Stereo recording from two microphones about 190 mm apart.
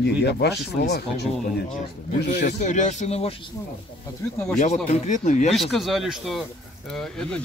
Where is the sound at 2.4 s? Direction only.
40° left (ahead or behind).